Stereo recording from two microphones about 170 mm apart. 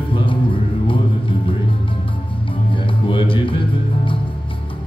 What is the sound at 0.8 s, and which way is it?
Music, 30° left (ahead or behind).